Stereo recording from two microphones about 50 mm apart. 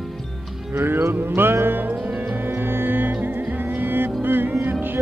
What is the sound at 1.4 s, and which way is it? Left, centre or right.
Music, right.